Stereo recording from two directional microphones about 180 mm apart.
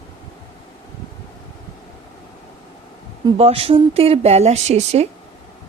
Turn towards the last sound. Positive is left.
turn(degrees=-35)  # may be behind; listen again after turning